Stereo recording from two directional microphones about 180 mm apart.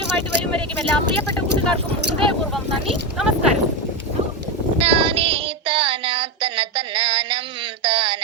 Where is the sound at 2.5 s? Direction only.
Centre (ahead or behind).